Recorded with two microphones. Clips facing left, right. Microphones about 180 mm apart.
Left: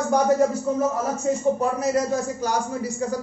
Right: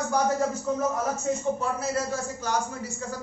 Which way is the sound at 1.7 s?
15° left (ahead or behind).